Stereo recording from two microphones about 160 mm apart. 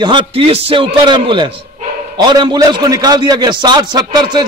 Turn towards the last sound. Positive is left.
turn(degrees=-25)  # may be behind; listen again after turning